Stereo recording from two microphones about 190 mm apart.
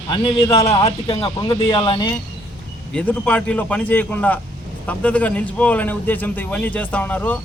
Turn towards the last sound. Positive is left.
turn(degrees=10)  # may be behind; listen again after turning